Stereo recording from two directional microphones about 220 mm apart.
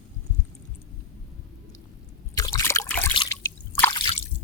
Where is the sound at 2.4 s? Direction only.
15° left (ahead or behind).